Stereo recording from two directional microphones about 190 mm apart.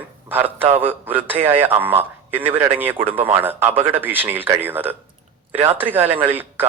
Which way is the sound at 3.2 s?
10° right (ahead or behind).